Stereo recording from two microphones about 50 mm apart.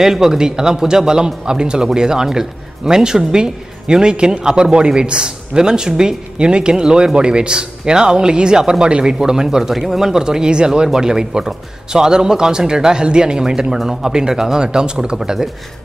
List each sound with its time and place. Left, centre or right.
0.0 s speech: centre